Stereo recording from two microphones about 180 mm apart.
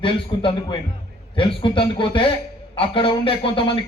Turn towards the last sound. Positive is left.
turn(degrees=30)  # may be behind; listen again after turning